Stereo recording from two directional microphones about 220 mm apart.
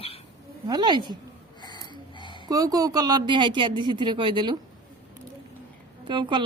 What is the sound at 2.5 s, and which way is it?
Speech, 15° right (ahead or behind).